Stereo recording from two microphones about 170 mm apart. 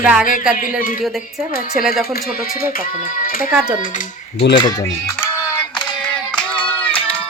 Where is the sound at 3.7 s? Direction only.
50° left (ahead or behind).